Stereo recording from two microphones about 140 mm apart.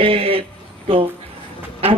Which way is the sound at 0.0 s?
40° right (ahead or behind).